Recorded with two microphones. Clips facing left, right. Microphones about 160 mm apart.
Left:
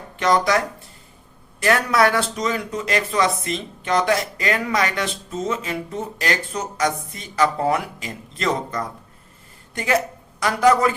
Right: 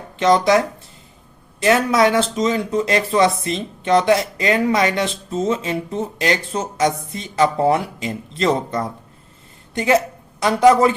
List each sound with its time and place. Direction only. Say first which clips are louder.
0.2 s speech: right 4 dB; 25° right (ahead or behind)
1.6 s speech: right 3 dB; 20° right (ahead or behind)